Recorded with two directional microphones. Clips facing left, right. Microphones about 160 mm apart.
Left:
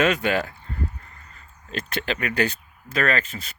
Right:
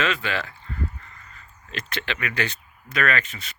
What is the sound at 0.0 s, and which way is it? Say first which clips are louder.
Speech: left 5 dB; 45° left (ahead or behind).